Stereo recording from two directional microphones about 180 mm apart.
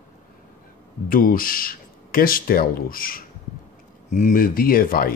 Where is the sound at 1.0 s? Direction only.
50° left (ahead or behind).